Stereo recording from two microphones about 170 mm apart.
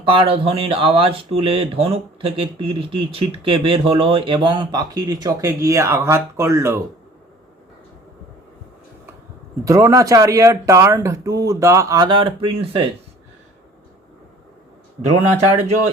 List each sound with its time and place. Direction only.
0.0 s speech: 30° right (ahead or behind); by 6.7 s 15° right (ahead or behind)
9.6 s speech: 20° right (ahead or behind)